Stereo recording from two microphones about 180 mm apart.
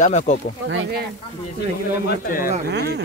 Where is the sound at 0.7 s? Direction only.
75° right (ahead or behind).